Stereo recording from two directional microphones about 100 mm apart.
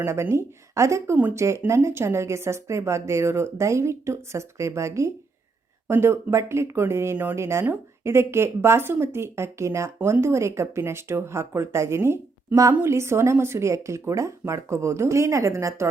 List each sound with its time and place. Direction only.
0.0 s speech: 25° right (ahead or behind)
1.1 s speech: 15° right (ahead or behind)
1.4 s speech: 30° right (ahead or behind)